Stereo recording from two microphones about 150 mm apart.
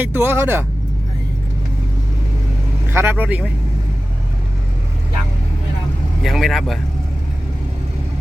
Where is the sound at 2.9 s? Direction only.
15° right (ahead or behind).